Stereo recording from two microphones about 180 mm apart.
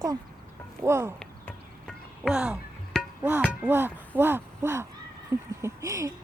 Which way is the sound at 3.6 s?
10° right (ahead or behind).